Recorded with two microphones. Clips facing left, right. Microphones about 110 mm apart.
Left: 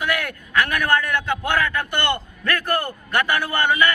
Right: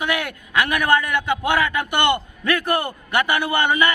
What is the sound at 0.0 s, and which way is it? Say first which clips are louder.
A man's voice: right 1 dB; 20° right (ahead or behind).